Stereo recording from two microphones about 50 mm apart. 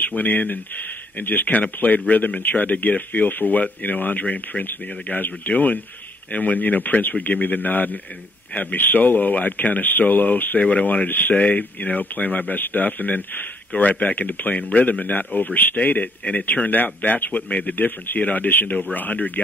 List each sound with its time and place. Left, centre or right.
0.0 s speech: left